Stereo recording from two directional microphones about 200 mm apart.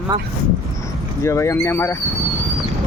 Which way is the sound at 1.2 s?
15° left (ahead or behind).